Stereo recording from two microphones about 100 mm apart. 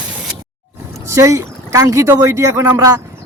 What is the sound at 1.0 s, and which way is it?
Speech, 30° right (ahead or behind).